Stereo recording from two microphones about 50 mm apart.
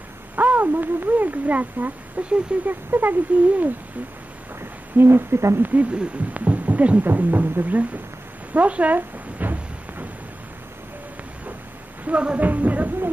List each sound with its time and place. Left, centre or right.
0.4 s speech: right
4.6 s speech: right
5.6 s speech: right
8.5 s a sound: right
12.0 s a woman's voice: right